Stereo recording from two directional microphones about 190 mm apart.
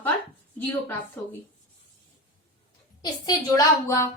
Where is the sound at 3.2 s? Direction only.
20° left (ahead or behind).